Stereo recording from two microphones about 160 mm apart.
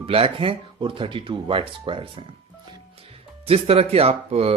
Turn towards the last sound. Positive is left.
turn(degrees=-40)  # may be behind; listen again after turning